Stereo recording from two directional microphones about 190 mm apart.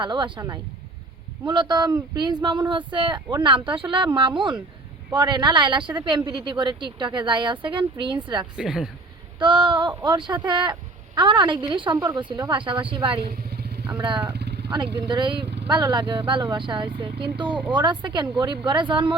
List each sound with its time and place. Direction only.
0.0 s speech: 25° right (ahead or behind)
8.5 s speech: 5° right (ahead or behind)
9.4 s speech: 25° right (ahead or behind)
13.2 s vehicle: 60° right (ahead or behind)
13.8 s speech: 20° right (ahead or behind)
14.3 s vehicle: 60° right (ahead or behind)
14.9 s speech: 25° right (ahead or behind)